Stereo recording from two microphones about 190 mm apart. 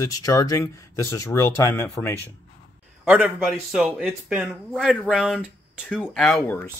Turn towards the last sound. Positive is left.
turn(degrees=10)  # may be behind; listen again after turning